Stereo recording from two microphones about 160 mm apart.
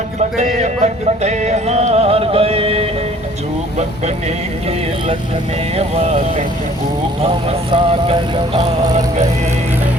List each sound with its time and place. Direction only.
0.6 s music: 45° right (ahead or behind)
5.7 s speech: 45° right (ahead or behind)
7.2 s music: 35° right (ahead or behind)